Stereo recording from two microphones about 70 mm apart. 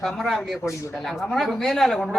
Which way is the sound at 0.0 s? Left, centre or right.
Centre.